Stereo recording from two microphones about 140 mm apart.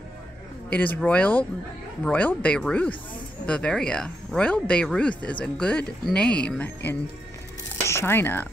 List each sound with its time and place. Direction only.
0.7 s speech: 10° left (ahead or behind)